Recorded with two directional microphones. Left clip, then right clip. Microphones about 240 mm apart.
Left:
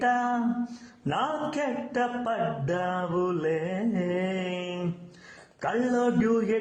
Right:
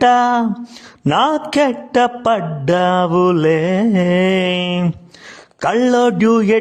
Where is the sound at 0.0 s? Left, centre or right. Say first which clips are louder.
Right 14 dB; right.